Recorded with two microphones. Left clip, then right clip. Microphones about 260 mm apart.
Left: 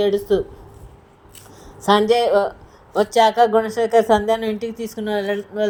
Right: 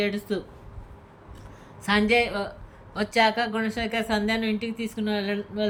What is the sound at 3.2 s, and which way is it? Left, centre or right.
Speech, left.